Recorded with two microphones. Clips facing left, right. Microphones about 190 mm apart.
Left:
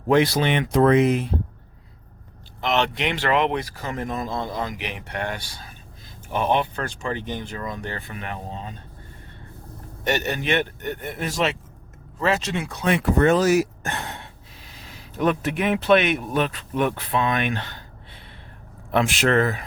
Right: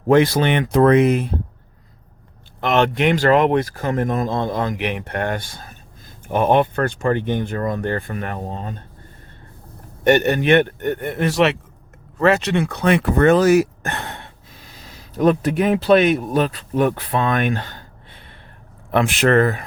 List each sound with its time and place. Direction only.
0.1 s speech: 50° right (ahead or behind)
2.6 s speech: 55° right (ahead or behind)
10.0 s speech: 60° right (ahead or behind)
14.8 s speech: 40° right (ahead or behind)
18.9 s speech: 55° right (ahead or behind)